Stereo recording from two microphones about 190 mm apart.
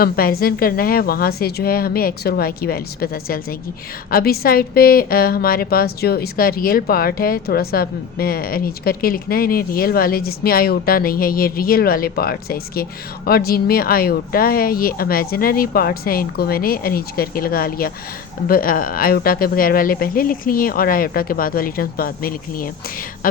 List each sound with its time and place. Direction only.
0.0 s a woman's voice: 50° left (ahead or behind)